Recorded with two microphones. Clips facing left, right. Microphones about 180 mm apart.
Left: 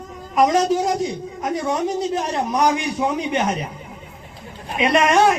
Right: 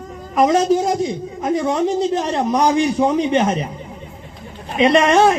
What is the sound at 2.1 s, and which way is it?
Speech, 30° right (ahead or behind).